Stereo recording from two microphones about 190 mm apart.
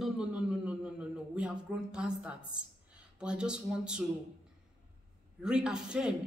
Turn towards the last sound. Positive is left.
turn(degrees=-5)  # may be behind; listen again after turning